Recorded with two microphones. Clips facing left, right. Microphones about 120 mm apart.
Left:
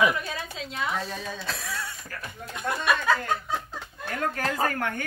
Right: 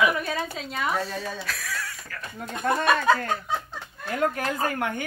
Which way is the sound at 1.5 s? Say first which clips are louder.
Even; 25° left (ahead or behind).